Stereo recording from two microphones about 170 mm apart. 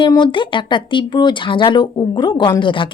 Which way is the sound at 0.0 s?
25° left (ahead or behind).